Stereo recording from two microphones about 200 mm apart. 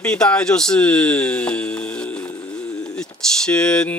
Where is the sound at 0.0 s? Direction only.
5° left (ahead or behind).